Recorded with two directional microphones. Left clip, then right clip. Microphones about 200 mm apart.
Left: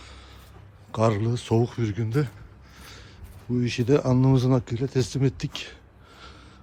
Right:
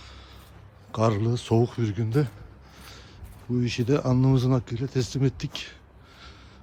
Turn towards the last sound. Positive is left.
turn(degrees=5)  # may be behind; listen again after turning